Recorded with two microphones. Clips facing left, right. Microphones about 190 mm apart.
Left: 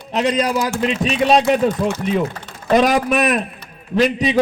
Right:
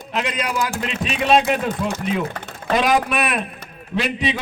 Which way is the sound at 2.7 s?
45° left (ahead or behind).